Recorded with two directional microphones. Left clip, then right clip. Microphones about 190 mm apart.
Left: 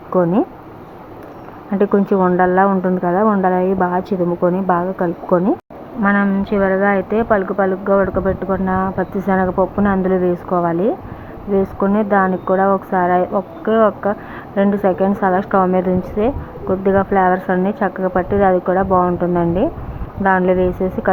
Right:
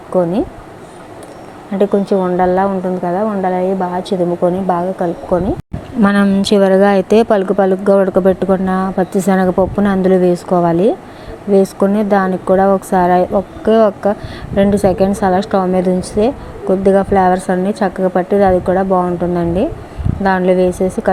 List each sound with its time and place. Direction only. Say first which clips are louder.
0.1 s speech: right 2 dB; centre (ahead or behind)
1.8 s a woman's voice: right 1 dB; 10° right (ahead or behind)
6.0 s a woman's voice: right 3 dB; 50° right (ahead or behind); by 20.9 s 30° right (ahead or behind)